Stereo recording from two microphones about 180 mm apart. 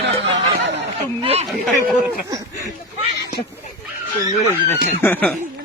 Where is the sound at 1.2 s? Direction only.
35° right (ahead or behind).